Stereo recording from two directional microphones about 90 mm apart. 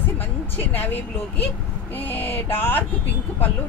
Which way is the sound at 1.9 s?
20° left (ahead or behind).